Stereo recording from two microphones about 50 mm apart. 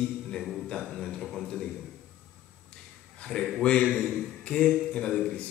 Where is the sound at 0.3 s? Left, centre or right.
Centre.